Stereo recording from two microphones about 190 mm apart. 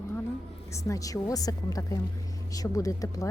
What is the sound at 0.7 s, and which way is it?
A woman's voice, 15° left (ahead or behind).